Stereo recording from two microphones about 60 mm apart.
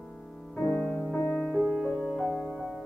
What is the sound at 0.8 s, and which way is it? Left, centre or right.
Music, centre.